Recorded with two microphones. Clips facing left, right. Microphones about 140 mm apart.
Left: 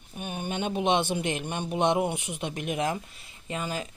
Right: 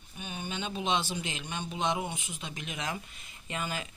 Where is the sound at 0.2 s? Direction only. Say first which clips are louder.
Left 6 dB; 55° left (ahead or behind).